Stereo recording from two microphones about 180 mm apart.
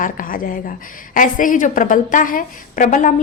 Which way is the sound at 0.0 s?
50° left (ahead or behind).